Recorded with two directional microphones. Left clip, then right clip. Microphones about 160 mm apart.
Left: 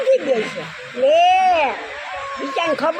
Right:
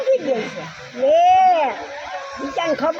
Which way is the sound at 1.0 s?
Centre (ahead or behind).